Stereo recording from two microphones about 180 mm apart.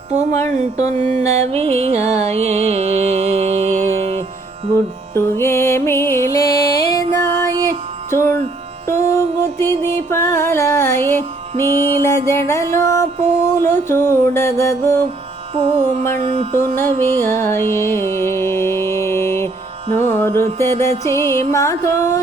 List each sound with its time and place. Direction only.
0.2 s music: 15° left (ahead or behind)
0.9 s music: 40° right (ahead or behind)
5.1 s music: 15° left (ahead or behind)
13.1 s music: 40° right (ahead or behind)
13.6 s music: 15° left (ahead or behind)
15.5 s music: 35° right (ahead or behind)
17.2 s music: 15° left (ahead or behind)